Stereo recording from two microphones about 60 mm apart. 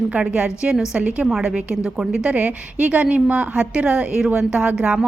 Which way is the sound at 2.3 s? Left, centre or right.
Right.